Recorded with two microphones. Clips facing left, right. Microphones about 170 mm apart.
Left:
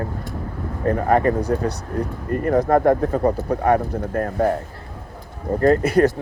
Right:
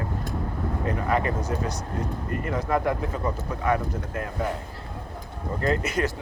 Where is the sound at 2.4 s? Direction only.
55° left (ahead or behind).